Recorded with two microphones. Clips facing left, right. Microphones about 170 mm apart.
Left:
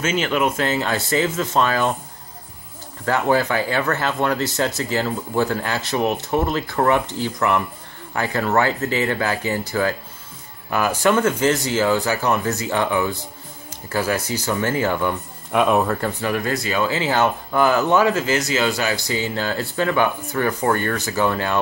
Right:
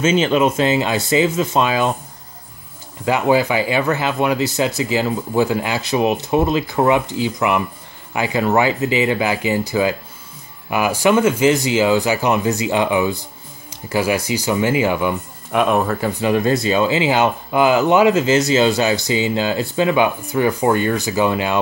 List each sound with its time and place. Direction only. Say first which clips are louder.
0.0 s speech: right 5 dB; 20° right (ahead or behind)
3.1 s speech: right 3 dB; 10° right (ahead or behind)
16.2 s speech: right 6 dB; 20° right (ahead or behind)